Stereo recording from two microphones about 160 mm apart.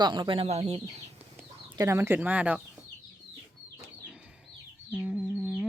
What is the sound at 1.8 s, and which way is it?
Speech, 15° right (ahead or behind).